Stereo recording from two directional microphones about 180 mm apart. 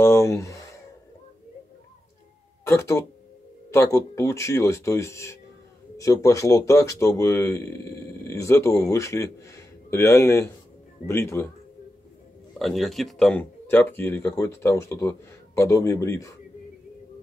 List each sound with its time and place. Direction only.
0.0 s speech: 15° left (ahead or behind)
2.6 s speech: 15° left (ahead or behind)
12.5 s speech: centre (ahead or behind); by 16.3 s 15° left (ahead or behind)